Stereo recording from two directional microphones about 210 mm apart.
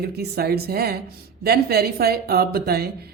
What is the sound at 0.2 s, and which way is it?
Speech, 50° right (ahead or behind).